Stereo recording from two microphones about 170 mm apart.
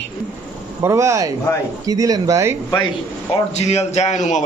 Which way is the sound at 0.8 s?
15° right (ahead or behind).